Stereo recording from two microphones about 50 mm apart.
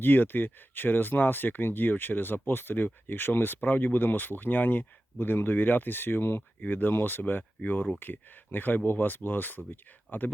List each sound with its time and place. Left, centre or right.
0.0 s speech: left